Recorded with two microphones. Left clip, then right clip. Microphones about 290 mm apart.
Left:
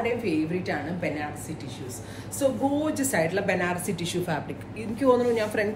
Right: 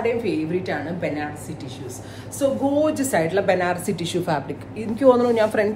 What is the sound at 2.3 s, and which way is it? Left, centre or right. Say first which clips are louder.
A woman's voice: right 5 dB; centre.